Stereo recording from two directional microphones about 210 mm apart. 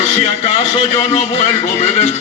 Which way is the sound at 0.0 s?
35° left (ahead or behind).